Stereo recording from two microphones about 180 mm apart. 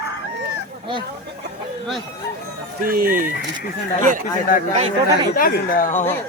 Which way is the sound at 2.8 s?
55° right (ahead or behind).